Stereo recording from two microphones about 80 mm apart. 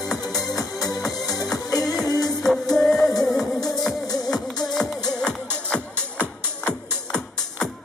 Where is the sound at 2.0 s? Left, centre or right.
Left.